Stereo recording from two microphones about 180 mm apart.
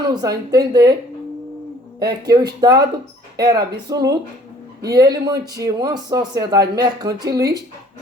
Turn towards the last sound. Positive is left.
turn(degrees=-20)  # may be behind; listen again after turning